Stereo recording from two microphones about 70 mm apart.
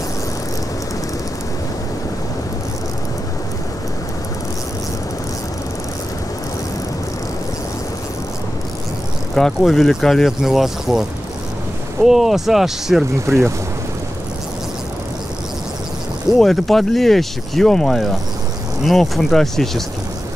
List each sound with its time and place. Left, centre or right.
9.3 s speech: centre
13.3 s speech: right
16.3 s speech: centre